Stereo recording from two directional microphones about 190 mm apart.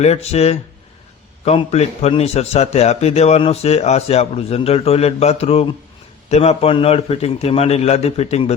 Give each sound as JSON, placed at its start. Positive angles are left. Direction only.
{"t": 0.0, "sound": "a man's voice", "side_deg": 35}